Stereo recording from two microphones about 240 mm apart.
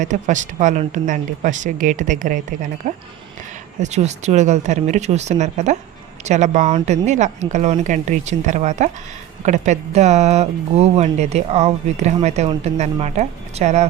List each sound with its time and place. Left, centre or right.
0.0 s speech: right